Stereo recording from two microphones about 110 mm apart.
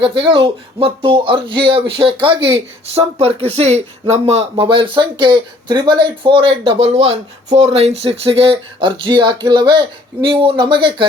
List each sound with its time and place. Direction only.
0.0 s speech: 50° right (ahead or behind); by 4.4 s 75° right (ahead or behind)
4.6 s speech: 50° right (ahead or behind)